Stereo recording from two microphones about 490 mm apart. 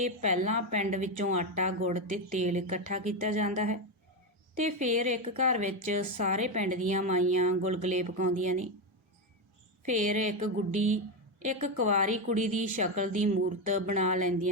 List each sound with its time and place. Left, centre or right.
0.0 s a woman's voice: centre
9.8 s a woman's voice: centre